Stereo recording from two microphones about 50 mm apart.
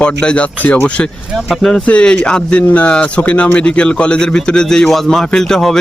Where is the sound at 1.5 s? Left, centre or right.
Centre.